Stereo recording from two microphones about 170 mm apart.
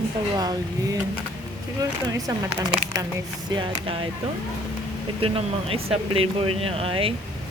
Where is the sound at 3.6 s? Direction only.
30° right (ahead or behind).